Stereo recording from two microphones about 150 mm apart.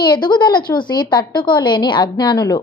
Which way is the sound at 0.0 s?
30° left (ahead or behind).